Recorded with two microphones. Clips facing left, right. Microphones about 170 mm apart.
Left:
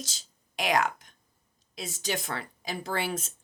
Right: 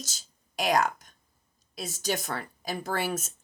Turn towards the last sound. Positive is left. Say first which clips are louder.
# right 1 dB
turn(degrees=-50)  # may be behind; listen again after turning